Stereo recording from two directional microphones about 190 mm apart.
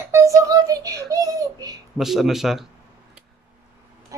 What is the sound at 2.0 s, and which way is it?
Speech, centre (ahead or behind).